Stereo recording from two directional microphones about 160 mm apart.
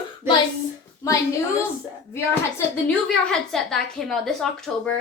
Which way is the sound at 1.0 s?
20° left (ahead or behind).